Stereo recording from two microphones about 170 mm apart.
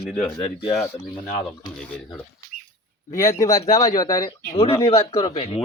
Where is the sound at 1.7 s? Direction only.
5° left (ahead or behind).